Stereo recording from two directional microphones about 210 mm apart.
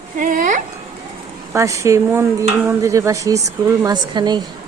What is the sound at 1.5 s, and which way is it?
Speech, 15° right (ahead or behind).